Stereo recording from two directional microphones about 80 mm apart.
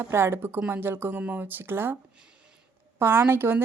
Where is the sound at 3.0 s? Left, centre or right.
Right.